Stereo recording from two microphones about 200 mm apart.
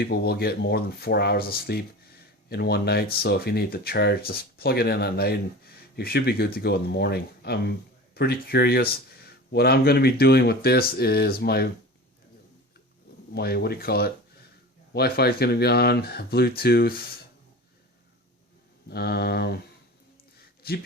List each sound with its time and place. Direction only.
0.0 s speech: 50° left (ahead or behind)
13.3 s speech: 55° left (ahead or behind)
18.9 s speech: 50° left (ahead or behind)
20.6 s speech: 50° left (ahead or behind)